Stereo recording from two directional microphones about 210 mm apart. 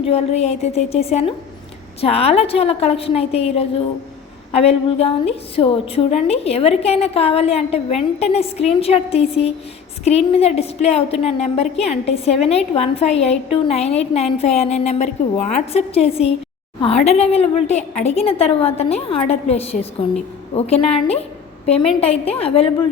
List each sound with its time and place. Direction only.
0.0 s a woman's voice: 30° left (ahead or behind)